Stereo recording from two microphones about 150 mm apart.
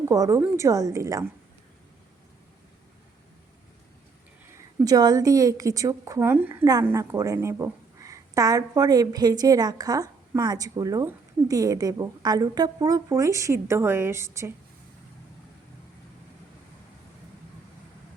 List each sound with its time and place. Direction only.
0.1 s a woman's voice: 20° right (ahead or behind)
4.5 s a woman's voice: 25° right (ahead or behind)